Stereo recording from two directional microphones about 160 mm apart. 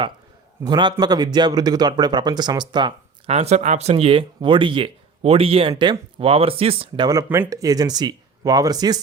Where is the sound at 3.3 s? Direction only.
40° right (ahead or behind).